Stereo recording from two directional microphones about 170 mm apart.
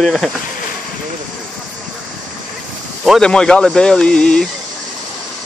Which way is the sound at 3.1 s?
5° left (ahead or behind).